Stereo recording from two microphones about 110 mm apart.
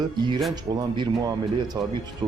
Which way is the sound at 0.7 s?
35° right (ahead or behind).